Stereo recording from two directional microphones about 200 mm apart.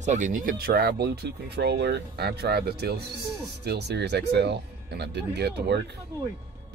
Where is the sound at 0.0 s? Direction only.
35° right (ahead or behind).